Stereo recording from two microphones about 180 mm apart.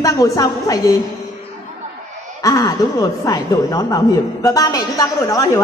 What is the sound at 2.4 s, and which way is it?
A woman's voice, 20° left (ahead or behind).